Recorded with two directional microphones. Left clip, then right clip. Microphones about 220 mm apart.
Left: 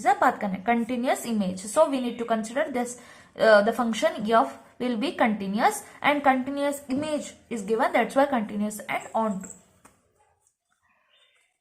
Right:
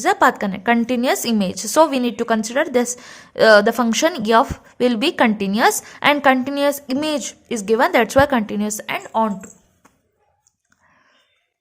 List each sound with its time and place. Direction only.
0.0 s a woman's voice: 50° right (ahead or behind)